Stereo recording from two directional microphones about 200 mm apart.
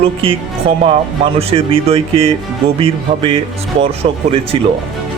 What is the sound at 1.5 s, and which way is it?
A man's voice, 25° right (ahead or behind).